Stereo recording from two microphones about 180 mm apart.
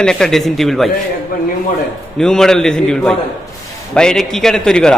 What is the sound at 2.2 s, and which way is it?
A man's voice, 5° left (ahead or behind).